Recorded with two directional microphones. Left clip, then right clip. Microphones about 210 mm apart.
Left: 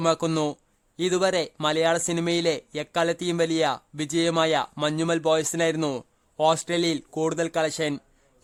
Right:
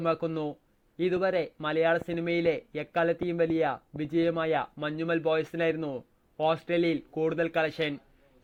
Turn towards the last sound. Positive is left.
turn(degrees=20)  # may be behind; listen again after turning